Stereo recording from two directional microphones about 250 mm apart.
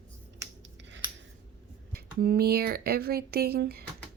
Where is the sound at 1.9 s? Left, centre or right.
Right.